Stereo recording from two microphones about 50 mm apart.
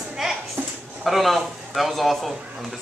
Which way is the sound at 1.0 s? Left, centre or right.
Centre.